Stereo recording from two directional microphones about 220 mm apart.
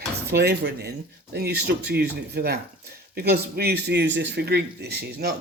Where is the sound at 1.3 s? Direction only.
50° right (ahead or behind).